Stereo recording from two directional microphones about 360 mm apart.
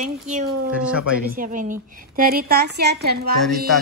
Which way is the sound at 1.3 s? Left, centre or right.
Right.